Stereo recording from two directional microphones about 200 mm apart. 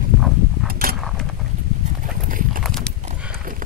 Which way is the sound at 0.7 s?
45° right (ahead or behind).